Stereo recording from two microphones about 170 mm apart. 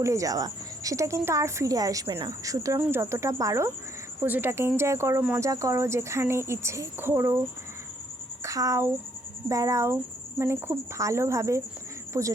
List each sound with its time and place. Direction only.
0.0 s speech: 20° right (ahead or behind)